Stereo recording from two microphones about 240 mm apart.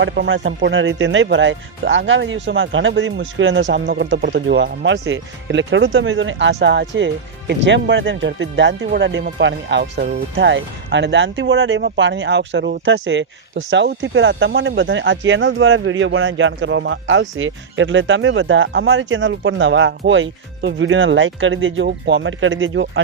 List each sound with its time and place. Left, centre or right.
0.0 s speech: right